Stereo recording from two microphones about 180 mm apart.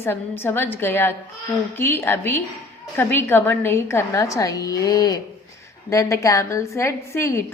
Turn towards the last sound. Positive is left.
turn(degrees=15)  # may be behind; listen again after turning